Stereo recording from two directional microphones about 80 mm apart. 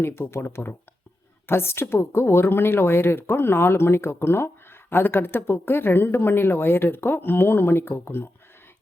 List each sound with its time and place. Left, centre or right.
0.2 s speech: left